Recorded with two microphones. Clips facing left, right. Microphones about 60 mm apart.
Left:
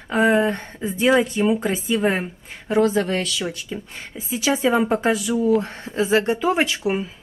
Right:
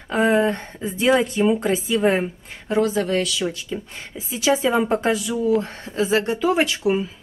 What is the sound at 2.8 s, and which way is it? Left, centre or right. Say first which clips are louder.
Speech: left 1 dB; left.